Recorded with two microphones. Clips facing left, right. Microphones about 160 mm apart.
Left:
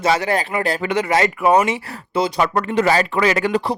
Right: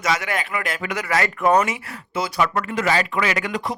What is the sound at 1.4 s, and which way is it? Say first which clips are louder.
Speech: left 1 dB; 10° left (ahead or behind).